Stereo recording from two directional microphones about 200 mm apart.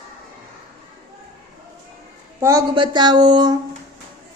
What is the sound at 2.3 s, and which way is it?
A woman's voice, 15° right (ahead or behind).